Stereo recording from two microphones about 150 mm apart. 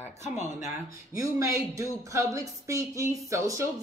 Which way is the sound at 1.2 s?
20° right (ahead or behind).